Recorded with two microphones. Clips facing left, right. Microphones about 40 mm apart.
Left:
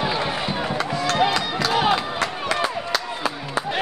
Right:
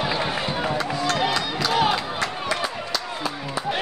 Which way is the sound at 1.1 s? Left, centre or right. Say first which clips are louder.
Left 6 dB; centre.